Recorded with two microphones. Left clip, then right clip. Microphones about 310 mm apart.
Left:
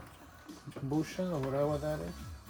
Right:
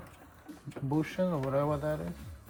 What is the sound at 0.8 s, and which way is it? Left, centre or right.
Speech, right.